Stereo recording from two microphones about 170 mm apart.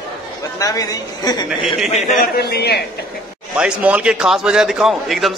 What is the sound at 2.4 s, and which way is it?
Speech, 70° left (ahead or behind).